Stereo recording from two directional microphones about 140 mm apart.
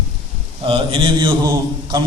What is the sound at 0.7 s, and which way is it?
Mantra, 40° right (ahead or behind).